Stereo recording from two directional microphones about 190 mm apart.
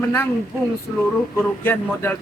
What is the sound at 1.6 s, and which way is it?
Speech, 10° left (ahead or behind).